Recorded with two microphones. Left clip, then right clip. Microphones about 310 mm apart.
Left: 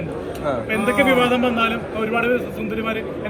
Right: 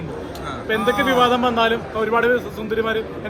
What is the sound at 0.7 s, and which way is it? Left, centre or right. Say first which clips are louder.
Speech: right 1 dB; right.